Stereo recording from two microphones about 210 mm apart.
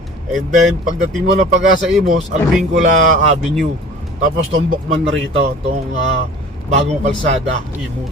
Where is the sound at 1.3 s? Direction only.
40° right (ahead or behind).